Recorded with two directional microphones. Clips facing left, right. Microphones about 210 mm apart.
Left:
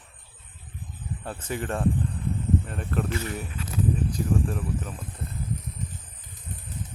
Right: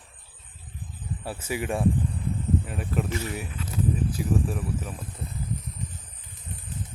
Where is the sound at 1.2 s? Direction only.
10° right (ahead or behind).